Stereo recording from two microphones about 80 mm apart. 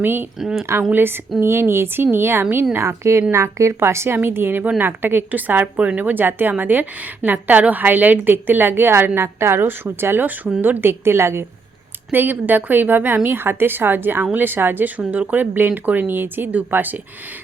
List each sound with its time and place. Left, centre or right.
0.0 s a woman's voice: right
0.3 s a woman's voice: centre
0.9 s a woman's voice: right